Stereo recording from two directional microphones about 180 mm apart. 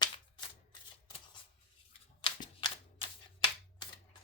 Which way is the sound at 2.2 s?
25° left (ahead or behind).